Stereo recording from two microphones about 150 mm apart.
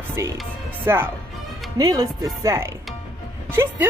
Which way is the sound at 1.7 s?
25° right (ahead or behind).